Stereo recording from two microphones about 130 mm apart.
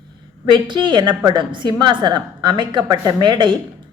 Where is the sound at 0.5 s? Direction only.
35° right (ahead or behind).